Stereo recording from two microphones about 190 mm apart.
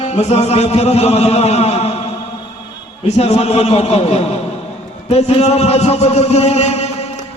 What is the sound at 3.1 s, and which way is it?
A man's voice, 35° left (ahead or behind).